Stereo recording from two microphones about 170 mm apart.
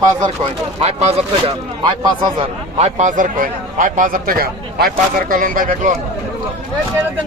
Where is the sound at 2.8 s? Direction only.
40° right (ahead or behind).